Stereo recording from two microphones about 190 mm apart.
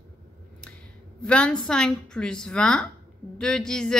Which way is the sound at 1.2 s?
5° left (ahead or behind).